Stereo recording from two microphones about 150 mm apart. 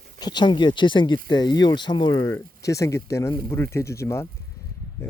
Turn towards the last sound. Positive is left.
turn(degrees=20)  # may be behind; listen again after turning